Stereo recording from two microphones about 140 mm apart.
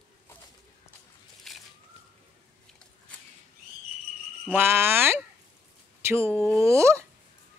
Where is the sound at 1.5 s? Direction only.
Centre (ahead or behind).